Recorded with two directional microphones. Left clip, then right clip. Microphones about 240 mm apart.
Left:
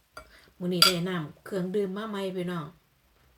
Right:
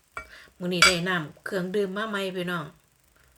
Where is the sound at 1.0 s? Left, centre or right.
Left.